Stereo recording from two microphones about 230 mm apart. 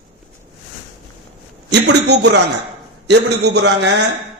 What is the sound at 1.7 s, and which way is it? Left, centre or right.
A man's voice, right.